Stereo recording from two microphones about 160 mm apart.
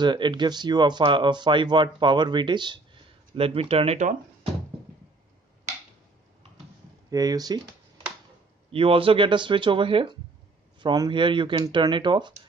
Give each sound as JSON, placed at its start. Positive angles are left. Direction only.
{"t": 0.0, "sound": "speech", "side_deg": -30}
{"t": 7.1, "sound": "speech", "side_deg": -25}
{"t": 8.7, "sound": "speech", "side_deg": -35}